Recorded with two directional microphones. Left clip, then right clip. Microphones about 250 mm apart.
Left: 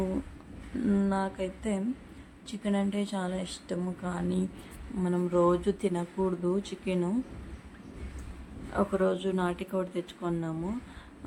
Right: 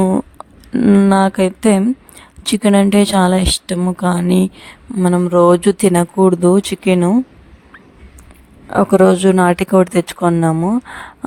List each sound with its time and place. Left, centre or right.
0.9 s speech: right
8.7 s speech: right